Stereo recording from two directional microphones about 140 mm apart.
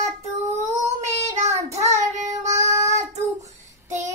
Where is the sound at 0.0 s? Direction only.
20° right (ahead or behind).